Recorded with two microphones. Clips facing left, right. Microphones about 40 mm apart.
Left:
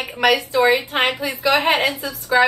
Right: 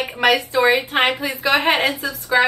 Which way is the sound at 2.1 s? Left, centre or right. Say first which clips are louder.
Left 2 dB; right.